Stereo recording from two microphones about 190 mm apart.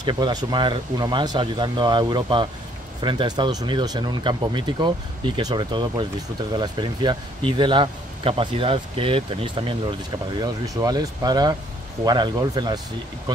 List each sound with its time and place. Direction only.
0.0 s speech: 20° right (ahead or behind)